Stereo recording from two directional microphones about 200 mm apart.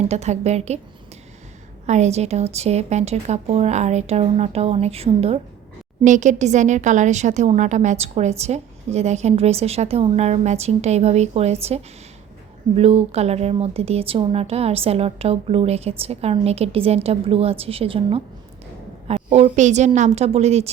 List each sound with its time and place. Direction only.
0.1 s speech: 35° right (ahead or behind)
1.9 s speech: 35° right (ahead or behind)